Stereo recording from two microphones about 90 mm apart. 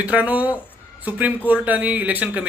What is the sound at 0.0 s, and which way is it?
Speech, 15° right (ahead or behind).